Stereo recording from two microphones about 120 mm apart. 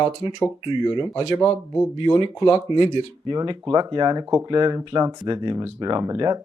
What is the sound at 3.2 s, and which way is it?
Speech, 40° right (ahead or behind).